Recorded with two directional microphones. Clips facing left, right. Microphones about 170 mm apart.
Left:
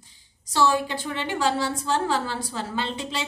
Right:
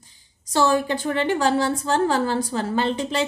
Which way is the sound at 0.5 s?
45° right (ahead or behind).